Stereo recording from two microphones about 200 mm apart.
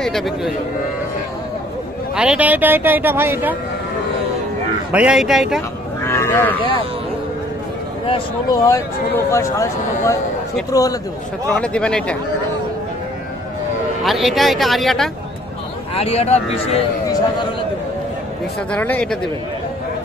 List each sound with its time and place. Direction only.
0.0 s speech: centre (ahead or behind)
2.1 s speech: 5° right (ahead or behind)
4.9 s speech: 5° right (ahead or behind)
6.0 s speech: 10° left (ahead or behind)
8.1 s speech: 20° left (ahead or behind)
11.5 s speech: 5° left (ahead or behind)
14.0 s speech: centre (ahead or behind)
15.9 s speech: 30° left (ahead or behind)
18.7 s speech: 5° left (ahead or behind)